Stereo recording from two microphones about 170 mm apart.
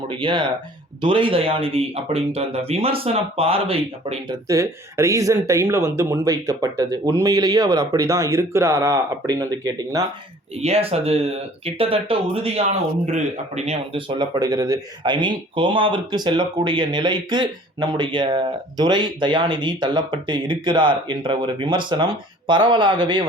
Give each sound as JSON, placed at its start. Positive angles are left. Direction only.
{"t": 0.1, "sound": "speech", "side_deg": -30}
{"t": 4.4, "sound": "speech", "side_deg": -20}
{"t": 10.6, "sound": "speech", "side_deg": -35}